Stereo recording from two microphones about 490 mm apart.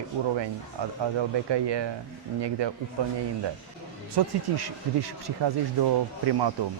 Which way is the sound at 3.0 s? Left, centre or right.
Right.